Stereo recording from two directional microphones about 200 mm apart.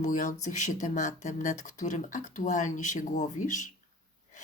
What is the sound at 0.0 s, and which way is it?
Speech, 40° left (ahead or behind).